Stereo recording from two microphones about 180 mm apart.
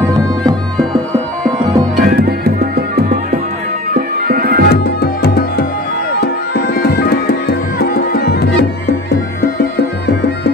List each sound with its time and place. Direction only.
2.0 s music: 60° right (ahead or behind)
4.6 s tabla: 60° left (ahead or behind)
6.1 s music: 60° left (ahead or behind)